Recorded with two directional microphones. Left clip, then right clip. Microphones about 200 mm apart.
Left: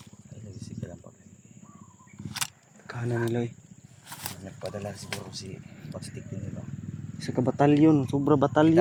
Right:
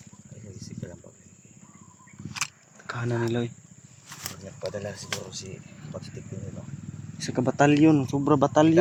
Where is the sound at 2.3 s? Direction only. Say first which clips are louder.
Right 2 dB; 25° left (ahead or behind).